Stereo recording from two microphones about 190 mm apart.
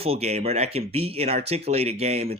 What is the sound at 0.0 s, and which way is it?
Speech, 35° right (ahead or behind).